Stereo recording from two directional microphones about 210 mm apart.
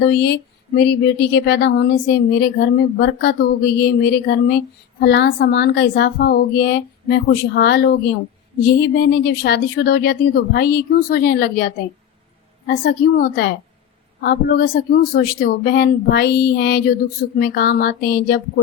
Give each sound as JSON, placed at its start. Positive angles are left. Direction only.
{"t": 0.0, "sound": "speech", "side_deg": 55}